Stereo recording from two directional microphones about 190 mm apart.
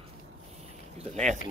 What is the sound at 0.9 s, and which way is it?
Speech, 35° right (ahead or behind).